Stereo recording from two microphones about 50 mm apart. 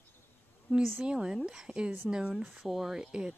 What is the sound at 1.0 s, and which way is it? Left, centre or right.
Speech, centre.